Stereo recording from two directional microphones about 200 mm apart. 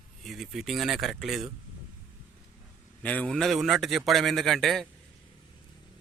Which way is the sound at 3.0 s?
5° left (ahead or behind).